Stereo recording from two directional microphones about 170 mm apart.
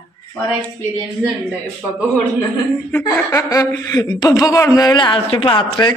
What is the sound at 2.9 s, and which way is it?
A woman's voice, 15° left (ahead or behind).